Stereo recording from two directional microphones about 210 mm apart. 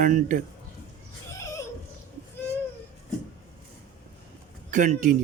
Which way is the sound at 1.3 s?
15° left (ahead or behind).